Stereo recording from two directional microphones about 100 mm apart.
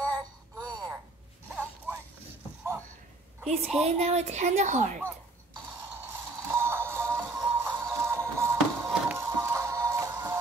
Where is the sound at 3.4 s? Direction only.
90° right.